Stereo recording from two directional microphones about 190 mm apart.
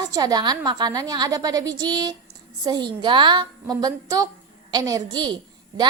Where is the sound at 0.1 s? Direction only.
20° right (ahead or behind).